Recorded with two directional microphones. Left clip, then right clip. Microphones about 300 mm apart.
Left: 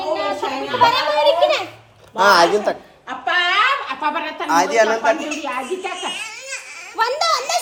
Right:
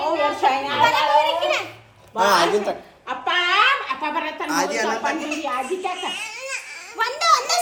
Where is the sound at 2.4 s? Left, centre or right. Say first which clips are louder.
Left 4 dB; centre.